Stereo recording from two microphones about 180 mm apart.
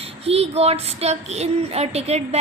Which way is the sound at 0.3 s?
35° right (ahead or behind).